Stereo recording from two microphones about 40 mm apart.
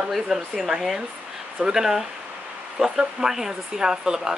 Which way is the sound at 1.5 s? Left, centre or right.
Centre.